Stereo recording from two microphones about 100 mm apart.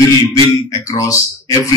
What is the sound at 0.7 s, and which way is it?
Speech, 35° left (ahead or behind).